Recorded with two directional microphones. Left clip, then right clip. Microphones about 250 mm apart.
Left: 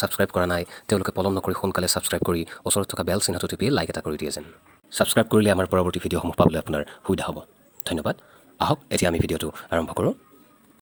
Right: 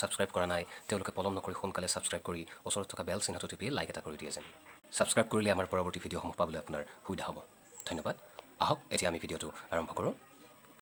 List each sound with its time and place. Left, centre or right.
0.0 s speech: left